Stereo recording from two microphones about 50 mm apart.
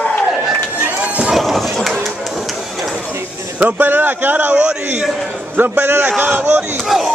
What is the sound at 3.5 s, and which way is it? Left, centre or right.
Speech, right.